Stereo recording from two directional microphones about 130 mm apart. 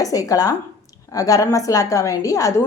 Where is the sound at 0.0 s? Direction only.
25° left (ahead or behind).